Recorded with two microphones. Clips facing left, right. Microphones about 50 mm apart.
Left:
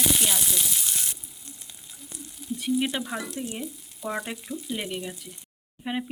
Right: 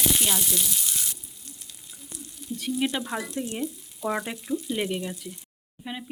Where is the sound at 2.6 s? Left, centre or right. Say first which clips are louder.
Left 1 dB; centre.